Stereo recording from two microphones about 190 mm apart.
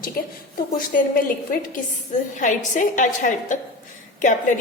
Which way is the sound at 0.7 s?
45° left (ahead or behind).